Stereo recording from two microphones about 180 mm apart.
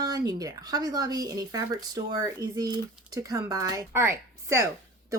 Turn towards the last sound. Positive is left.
turn(degrees=-15)  # may be behind; listen again after turning